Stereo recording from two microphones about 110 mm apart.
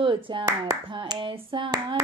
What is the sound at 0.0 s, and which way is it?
Speech, 50° right (ahead or behind).